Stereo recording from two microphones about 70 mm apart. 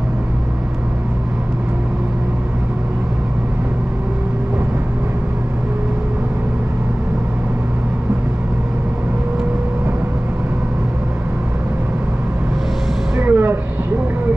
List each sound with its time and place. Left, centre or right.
13.2 s vehicle: right